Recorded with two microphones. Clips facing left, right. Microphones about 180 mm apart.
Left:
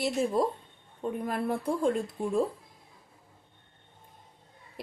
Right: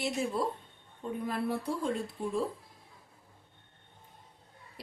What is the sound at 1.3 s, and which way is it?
Speech, 50° left (ahead or behind).